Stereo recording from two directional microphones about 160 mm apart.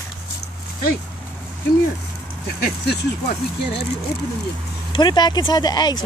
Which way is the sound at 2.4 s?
90° left.